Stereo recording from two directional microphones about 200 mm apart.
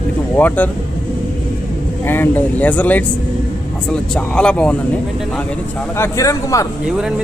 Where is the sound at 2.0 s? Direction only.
10° left (ahead or behind).